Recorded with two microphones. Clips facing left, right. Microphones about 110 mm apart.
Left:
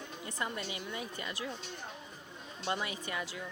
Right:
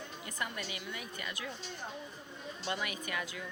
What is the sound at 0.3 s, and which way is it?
Speech, 25° left (ahead or behind).